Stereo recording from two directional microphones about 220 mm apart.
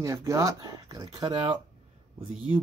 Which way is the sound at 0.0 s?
15° right (ahead or behind).